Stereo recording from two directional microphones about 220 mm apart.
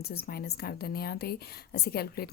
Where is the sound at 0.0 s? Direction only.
45° left (ahead or behind).